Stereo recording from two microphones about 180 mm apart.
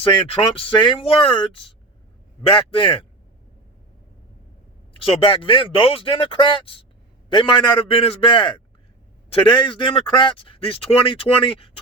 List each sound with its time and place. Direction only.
0.0 s speech: 30° left (ahead or behind)
2.6 s speech: 30° left (ahead or behind)
4.9 s speech: 30° left (ahead or behind)